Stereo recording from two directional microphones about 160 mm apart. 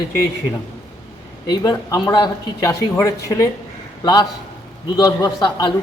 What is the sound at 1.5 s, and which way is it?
A man's voice, 25° left (ahead or behind).